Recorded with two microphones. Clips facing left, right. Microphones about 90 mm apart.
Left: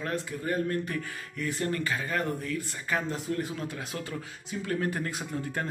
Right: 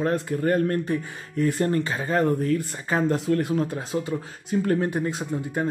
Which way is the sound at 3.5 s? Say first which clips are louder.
Right 11 dB; 40° right (ahead or behind).